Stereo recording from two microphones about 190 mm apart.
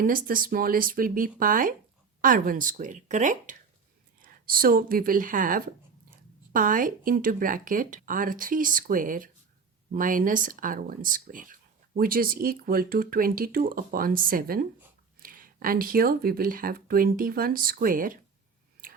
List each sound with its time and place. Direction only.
0.0 s speech: 45° right (ahead or behind)